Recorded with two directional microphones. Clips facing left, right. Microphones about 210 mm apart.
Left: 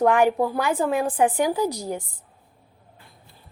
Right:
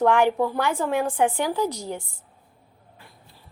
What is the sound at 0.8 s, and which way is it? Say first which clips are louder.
Speech: left 2 dB; 35° left (ahead or behind).